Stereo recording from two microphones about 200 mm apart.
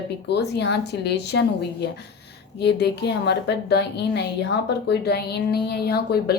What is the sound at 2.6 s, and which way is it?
A woman's voice, 55° left (ahead or behind).